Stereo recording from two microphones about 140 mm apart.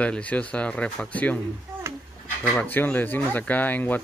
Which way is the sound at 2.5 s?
10° left (ahead or behind).